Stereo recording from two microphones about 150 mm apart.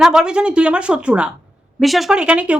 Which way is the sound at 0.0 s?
5° right (ahead or behind).